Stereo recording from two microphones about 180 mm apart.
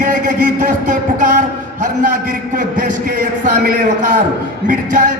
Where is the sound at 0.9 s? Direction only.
45° right (ahead or behind).